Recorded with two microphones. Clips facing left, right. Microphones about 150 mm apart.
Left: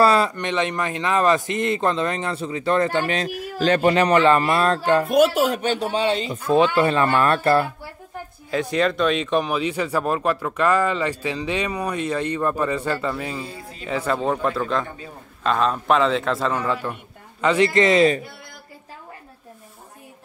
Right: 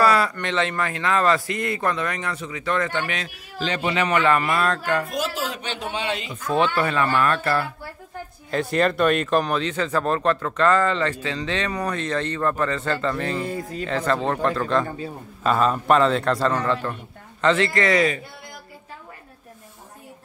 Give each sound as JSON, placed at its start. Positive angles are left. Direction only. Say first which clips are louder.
{"t": 0.0, "sound": "speech", "louder": "left 2 dB", "side_deg": 25}
{"t": 5.1, "sound": "speech", "louder": "left 10 dB", "side_deg": 60}
{"t": 6.5, "sound": "speech", "louder": "left 4 dB", "side_deg": 20}
{"t": 6.9, "sound": "speech", "louder": "left 3 dB", "side_deg": 35}
{"t": 8.5, "sound": "speech", "louder": "even", "side_deg": 0}
{"t": 13.5, "sound": "speech", "louder": "right 9 dB", "side_deg": -45}
{"t": 13.8, "sound": "speech", "louder": "left 1 dB", "side_deg": 10}